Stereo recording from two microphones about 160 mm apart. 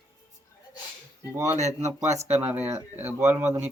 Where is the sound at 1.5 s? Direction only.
45° right (ahead or behind).